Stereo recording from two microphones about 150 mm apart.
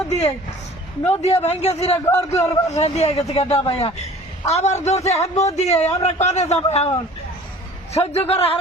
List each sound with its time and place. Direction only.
1.2 s a man's voice: 45° left (ahead or behind)
2.0 s a man's voice: 20° left (ahead or behind)
2.6 s a man's voice: 45° left (ahead or behind)
7.9 s a man's voice: 45° left (ahead or behind)